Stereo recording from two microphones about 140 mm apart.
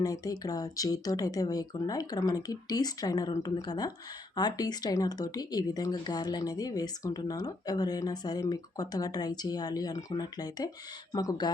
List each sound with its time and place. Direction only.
0.0 s speech: 25° left (ahead or behind)